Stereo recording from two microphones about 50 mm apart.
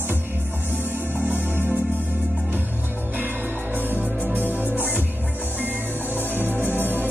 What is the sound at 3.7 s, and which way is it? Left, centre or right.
Music, right.